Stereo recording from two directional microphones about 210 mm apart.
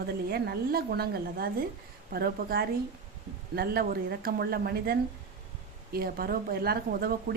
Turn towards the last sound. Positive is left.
turn(degrees=-45)  # may be behind; listen again after turning